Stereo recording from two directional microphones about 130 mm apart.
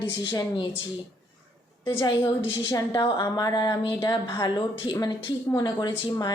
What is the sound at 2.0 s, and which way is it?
A woman's voice, 35° left (ahead or behind).